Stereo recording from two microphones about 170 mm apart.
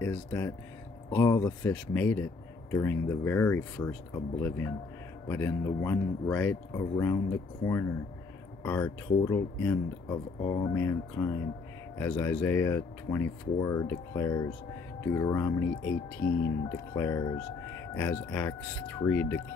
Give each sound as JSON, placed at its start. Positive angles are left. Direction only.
{"t": 0.0, "sound": "speech", "side_deg": 15}
{"t": 8.6, "sound": "speech", "side_deg": 10}